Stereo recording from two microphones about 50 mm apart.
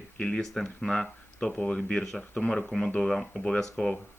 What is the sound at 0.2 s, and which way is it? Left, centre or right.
Speech, centre.